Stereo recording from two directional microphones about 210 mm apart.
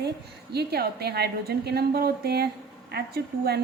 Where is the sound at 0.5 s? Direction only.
50° right (ahead or behind).